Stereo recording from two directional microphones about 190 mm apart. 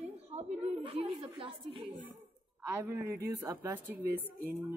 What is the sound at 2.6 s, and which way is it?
A woman's voice, 10° right (ahead or behind).